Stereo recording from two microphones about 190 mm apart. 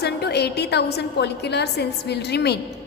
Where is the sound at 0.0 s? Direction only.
60° left (ahead or behind).